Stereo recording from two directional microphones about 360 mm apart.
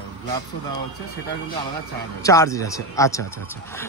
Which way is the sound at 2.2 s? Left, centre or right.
Centre.